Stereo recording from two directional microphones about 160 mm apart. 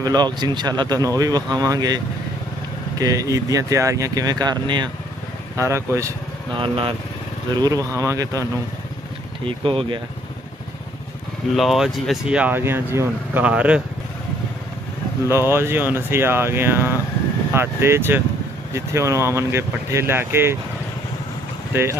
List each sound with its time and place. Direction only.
0.0 s speech: 25° right (ahead or behind)
3.0 s speech: 20° right (ahead or behind)
6.5 s speech: 35° right (ahead or behind)
7.5 s speech: 25° right (ahead or behind)
9.4 s speech: 35° right (ahead or behind)
11.5 s speech: centre (ahead or behind)
15.2 s speech: 15° right (ahead or behind)